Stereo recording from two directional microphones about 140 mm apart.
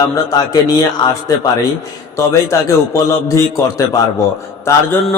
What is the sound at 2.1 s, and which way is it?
A man's voice, 20° left (ahead or behind).